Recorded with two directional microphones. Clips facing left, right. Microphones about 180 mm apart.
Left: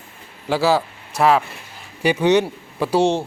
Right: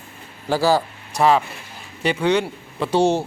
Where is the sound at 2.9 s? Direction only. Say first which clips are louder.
Even; 5° right (ahead or behind).